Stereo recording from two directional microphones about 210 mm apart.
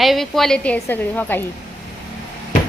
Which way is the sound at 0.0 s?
Centre (ahead or behind).